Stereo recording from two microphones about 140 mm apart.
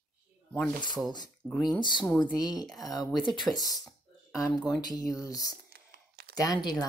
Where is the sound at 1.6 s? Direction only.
30° left (ahead or behind).